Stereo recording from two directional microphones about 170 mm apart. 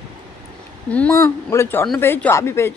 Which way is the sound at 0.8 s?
10° left (ahead or behind).